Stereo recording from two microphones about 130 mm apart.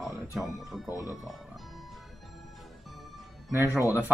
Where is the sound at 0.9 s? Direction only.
25° left (ahead or behind).